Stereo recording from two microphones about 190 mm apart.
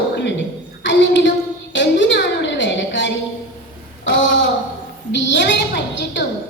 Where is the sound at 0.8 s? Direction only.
75° left (ahead or behind).